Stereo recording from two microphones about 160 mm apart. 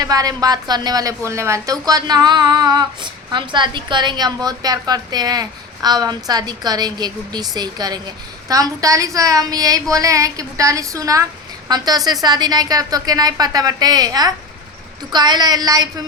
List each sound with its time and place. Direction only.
0.0 s a woman's voice: 25° right (ahead or behind)